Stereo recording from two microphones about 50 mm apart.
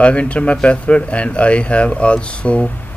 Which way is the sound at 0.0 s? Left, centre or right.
Left.